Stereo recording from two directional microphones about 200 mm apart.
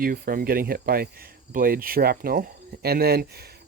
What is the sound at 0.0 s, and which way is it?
Speech, 45° right (ahead or behind).